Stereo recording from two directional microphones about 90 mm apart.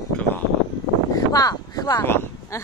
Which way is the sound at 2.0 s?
25° left (ahead or behind).